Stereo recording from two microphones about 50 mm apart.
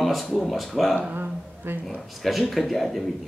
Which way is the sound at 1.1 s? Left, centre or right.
Right.